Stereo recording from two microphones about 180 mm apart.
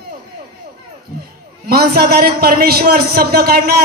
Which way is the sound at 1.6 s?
60° right (ahead or behind).